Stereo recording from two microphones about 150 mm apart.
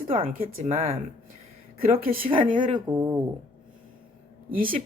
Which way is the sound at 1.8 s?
75° right (ahead or behind).